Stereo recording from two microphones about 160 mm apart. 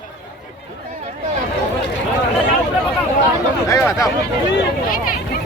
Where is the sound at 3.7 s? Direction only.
20° left (ahead or behind).